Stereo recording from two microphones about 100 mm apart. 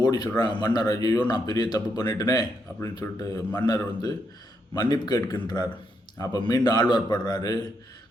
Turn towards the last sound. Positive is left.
turn(degrees=40)  # may be behind; listen again after turning